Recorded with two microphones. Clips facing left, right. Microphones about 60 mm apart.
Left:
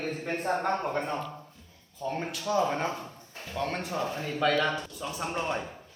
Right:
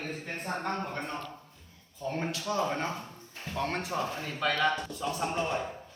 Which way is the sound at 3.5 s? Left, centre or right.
Centre.